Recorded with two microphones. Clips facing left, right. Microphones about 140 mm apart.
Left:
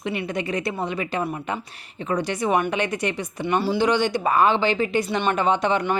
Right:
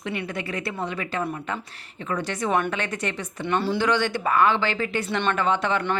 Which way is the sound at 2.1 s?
15° left (ahead or behind).